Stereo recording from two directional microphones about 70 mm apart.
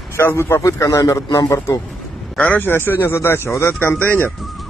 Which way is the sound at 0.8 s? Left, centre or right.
Left.